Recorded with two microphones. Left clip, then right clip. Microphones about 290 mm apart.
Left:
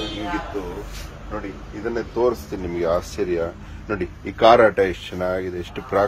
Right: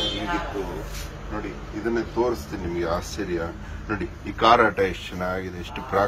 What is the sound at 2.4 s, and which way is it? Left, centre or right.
Speech, left.